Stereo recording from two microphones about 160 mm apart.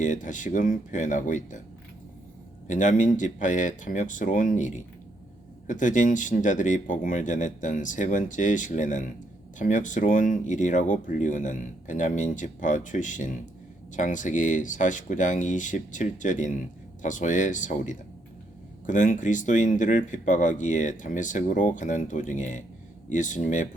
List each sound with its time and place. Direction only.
0.0 s speech: 50° left (ahead or behind)
2.6 s speech: 50° left (ahead or behind)